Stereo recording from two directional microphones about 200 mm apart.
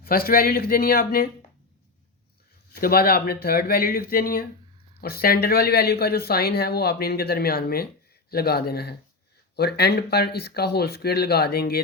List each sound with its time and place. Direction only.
0.0 s speech: 50° left (ahead or behind)
2.7 s speech: 50° left (ahead or behind)